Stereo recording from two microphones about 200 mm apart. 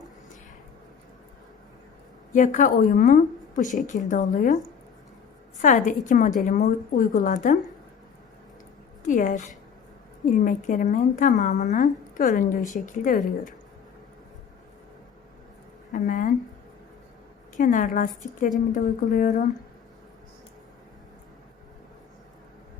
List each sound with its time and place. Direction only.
2.3 s a woman's voice: 40° left (ahead or behind)
5.6 s a woman's voice: 40° left (ahead or behind)
9.0 s a woman's voice: 40° left (ahead or behind)
15.9 s a woman's voice: 40° left (ahead or behind)
17.6 s a woman's voice: 40° left (ahead or behind)